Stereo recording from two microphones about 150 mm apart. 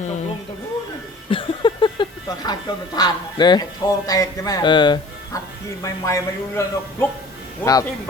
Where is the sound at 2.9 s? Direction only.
30° left (ahead or behind).